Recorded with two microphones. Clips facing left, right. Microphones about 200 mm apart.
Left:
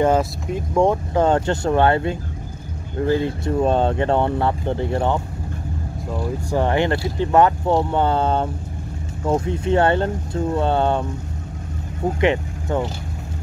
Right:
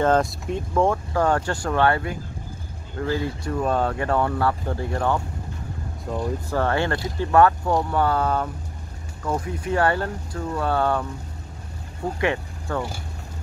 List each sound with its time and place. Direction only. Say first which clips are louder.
0.0 s speech: left 2 dB; 5° left (ahead or behind)
0.7 s speech: left 4 dB; 20° left (ahead or behind)
6.5 s speech: left 5 dB; 15° left (ahead or behind)
12.2 s speech: left 5 dB; 20° left (ahead or behind)